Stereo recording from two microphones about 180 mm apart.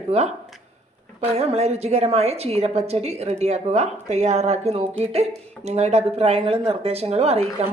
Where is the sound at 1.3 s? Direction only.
35° right (ahead or behind).